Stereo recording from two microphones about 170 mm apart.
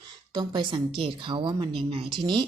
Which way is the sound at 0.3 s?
25° right (ahead or behind).